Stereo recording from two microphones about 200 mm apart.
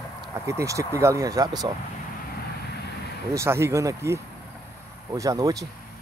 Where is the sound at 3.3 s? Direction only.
15° right (ahead or behind).